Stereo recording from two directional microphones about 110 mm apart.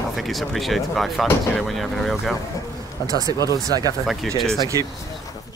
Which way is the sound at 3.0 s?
35° right (ahead or behind).